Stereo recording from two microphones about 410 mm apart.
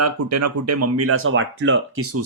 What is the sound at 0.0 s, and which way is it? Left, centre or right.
Speech, right.